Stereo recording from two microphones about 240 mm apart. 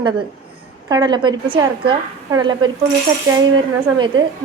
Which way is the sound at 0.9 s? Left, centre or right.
Centre.